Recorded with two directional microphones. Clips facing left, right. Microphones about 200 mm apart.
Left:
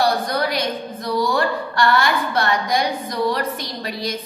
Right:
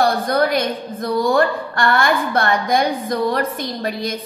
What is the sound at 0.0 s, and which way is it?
A woman's voice, 50° right (ahead or behind).